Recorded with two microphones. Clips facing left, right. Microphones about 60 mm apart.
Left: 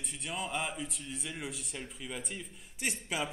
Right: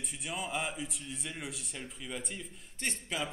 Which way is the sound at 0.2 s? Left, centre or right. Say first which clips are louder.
Even; centre.